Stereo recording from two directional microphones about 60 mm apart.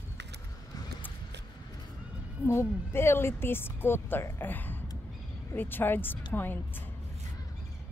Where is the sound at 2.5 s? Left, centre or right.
Left.